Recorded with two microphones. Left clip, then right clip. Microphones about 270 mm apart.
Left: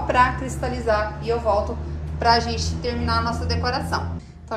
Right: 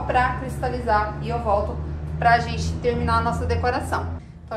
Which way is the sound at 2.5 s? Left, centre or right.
Centre.